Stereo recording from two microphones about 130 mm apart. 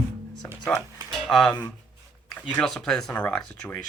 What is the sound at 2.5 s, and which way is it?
Speech, 5° left (ahead or behind).